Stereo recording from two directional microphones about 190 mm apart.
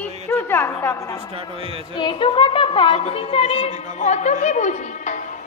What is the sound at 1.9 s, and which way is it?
A woman's voice, 25° left (ahead or behind).